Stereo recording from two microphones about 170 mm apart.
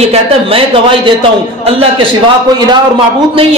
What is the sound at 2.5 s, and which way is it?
Speech, 25° right (ahead or behind).